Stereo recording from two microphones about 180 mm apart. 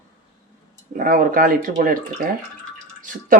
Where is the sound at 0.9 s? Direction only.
50° right (ahead or behind).